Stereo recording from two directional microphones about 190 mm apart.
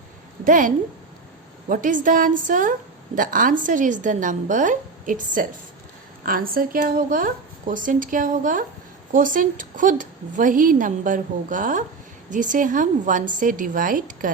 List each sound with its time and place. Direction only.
0.4 s a woman's voice: 45° right (ahead or behind)